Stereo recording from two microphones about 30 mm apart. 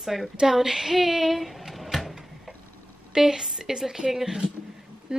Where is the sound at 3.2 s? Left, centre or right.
Centre.